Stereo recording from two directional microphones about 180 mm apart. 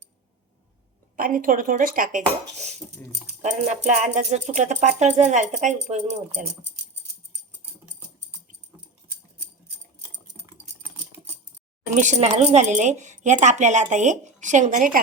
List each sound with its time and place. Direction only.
1.1 s speech: 50° right (ahead or behind)
11.9 s speech: 40° right (ahead or behind)